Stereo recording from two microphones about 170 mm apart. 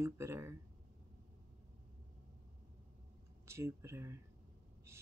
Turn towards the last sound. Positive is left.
turn(degrees=-15)  # may be behind; listen again after turning